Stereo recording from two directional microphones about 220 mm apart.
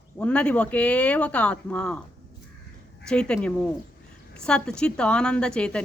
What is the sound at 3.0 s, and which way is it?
Speech, 5° left (ahead or behind).